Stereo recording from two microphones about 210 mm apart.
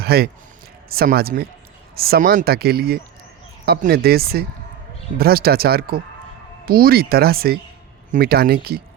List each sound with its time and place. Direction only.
0.0 s speech: 50° right (ahead or behind)